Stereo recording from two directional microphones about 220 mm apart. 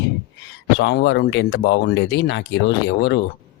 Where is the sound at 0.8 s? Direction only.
50° left (ahead or behind).